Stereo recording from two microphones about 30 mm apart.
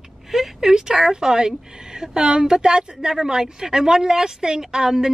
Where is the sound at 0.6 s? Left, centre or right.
Centre.